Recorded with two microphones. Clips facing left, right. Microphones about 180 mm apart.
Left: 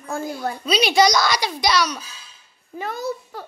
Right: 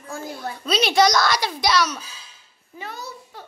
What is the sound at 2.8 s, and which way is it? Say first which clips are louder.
Speech: left 8 dB; 50° left (ahead or behind).